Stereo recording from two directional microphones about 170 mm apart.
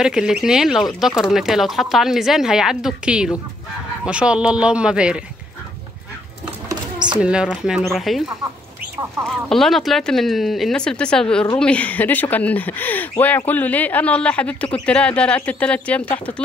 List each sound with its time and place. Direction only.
0.0 s speech: 5° right (ahead or behind)
6.7 s a sound: 25° right (ahead or behind)
7.2 s speech: 5° right (ahead or behind)
9.2 s speech: centre (ahead or behind)